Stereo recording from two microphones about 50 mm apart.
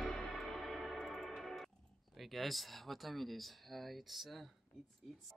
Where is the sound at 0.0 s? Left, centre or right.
Centre.